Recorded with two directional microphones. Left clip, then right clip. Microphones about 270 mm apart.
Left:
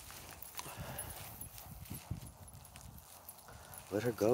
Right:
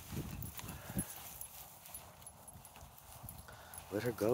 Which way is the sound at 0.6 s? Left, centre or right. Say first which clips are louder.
Left 5 dB; left.